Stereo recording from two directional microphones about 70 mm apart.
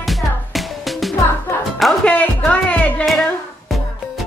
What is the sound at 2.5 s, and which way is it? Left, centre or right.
Music, centre.